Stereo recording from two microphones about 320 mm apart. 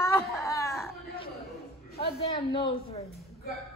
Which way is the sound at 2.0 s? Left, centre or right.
Centre.